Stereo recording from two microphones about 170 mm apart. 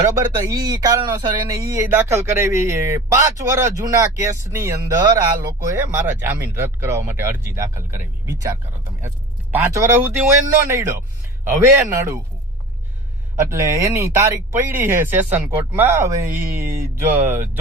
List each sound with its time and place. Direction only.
0.1 s speech: 20° right (ahead or behind)
13.4 s speech: 15° right (ahead or behind)